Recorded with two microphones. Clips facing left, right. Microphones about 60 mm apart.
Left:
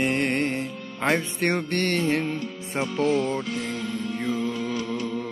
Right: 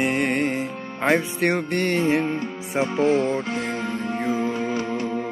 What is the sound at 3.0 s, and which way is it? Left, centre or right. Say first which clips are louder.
Music: right 2 dB; right.